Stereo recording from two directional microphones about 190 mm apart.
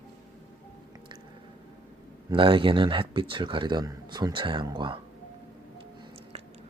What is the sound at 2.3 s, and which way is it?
Speech, 25° right (ahead or behind).